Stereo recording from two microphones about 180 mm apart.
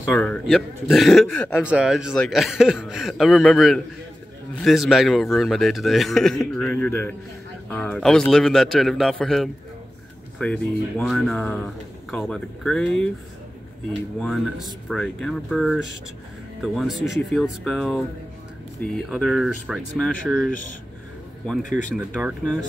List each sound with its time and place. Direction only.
0.0 s a man's voice: 5° left (ahead or behind)
1.6 s a man's voice: 5° right (ahead or behind)
14.2 s a man's voice: centre (ahead or behind)
21.6 s speech: 45° left (ahead or behind)
21.9 s a man's voice: 5° right (ahead or behind)